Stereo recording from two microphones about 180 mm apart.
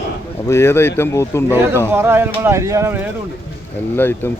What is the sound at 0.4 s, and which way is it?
Speech, 15° left (ahead or behind).